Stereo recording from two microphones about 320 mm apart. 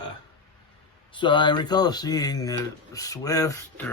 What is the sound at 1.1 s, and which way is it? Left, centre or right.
Speech, centre.